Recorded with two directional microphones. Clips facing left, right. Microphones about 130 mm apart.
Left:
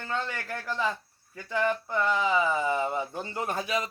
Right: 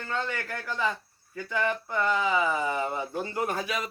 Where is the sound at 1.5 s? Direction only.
20° left (ahead or behind).